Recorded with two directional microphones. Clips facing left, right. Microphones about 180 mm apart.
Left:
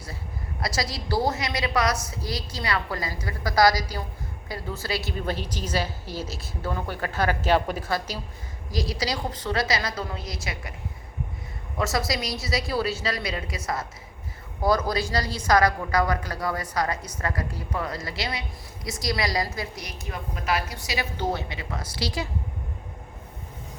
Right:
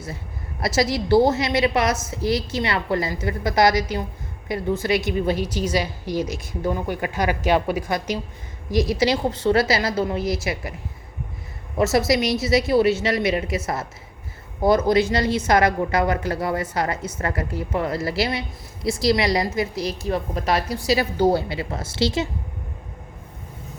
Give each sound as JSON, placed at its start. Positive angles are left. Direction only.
{"t": 0.6, "sound": "a woman's voice", "side_deg": -25}
{"t": 11.8, "sound": "a woman's voice", "side_deg": -25}